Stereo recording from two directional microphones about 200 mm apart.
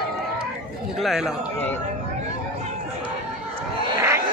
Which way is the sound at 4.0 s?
15° right (ahead or behind).